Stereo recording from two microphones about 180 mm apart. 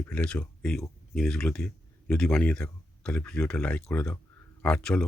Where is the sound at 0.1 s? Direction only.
5° left (ahead or behind).